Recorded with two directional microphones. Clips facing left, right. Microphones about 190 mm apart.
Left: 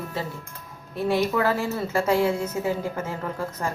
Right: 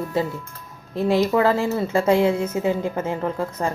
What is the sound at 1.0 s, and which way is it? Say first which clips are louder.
A woman's voice: right 4 dB; 20° right (ahead or behind).